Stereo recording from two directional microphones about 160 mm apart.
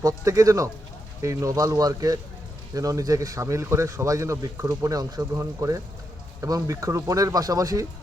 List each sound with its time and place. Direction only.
0.0 s a man's voice: 20° right (ahead or behind)